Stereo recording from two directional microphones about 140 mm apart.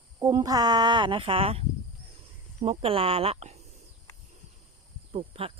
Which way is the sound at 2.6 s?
40° right (ahead or behind).